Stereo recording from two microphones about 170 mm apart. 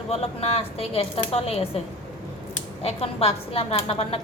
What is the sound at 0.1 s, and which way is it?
Speech, 35° left (ahead or behind).